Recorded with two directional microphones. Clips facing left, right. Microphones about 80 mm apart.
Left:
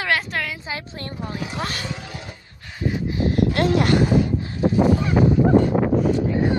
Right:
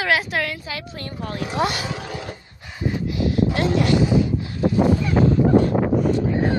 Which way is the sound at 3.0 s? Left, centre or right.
Left.